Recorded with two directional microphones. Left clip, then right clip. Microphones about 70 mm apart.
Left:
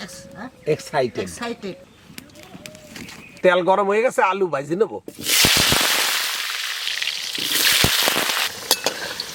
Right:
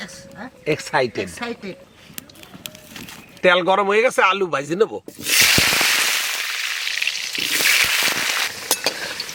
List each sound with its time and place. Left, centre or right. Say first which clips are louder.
0.0 s a sound: right 1 dB; centre
0.6 s speech: right 1 dB; right
1.4 s a woman's voice: even; centre
2.6 s run: right 2 dB; centre
3.4 s speech: right 1 dB; right
5.2 s snake: right 1 dB; centre
6.1 s frying: right 1 dB; centre